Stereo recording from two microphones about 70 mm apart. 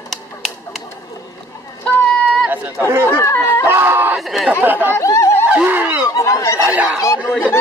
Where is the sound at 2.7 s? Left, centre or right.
Right.